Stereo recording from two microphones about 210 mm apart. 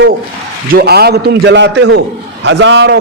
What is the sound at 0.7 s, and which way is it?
A man's voice, 50° right (ahead or behind).